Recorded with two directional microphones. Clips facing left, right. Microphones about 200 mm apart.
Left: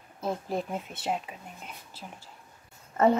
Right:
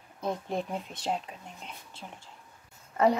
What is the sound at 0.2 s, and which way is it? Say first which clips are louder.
Speech: left 1 dB; 5° left (ahead or behind).